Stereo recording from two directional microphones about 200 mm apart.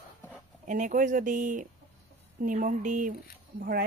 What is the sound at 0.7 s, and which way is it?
Speech, 40° right (ahead or behind).